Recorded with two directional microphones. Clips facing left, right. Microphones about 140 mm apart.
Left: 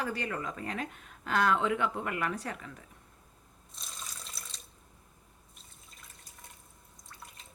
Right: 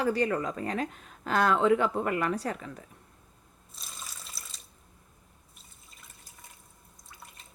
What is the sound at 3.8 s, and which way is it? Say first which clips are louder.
Water tap: even; 5° right (ahead or behind).